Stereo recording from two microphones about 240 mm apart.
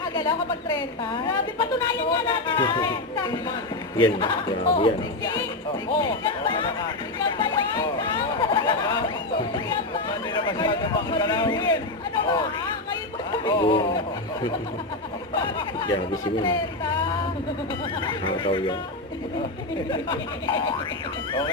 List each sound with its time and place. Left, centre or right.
0.0 s a woman's voice: centre
7.3 s a sound: centre
12.2 s a woman's voice: centre
15.4 s a woman's voice: centre
18.0 s a woman's voice: left
19.9 s a woman's voice: centre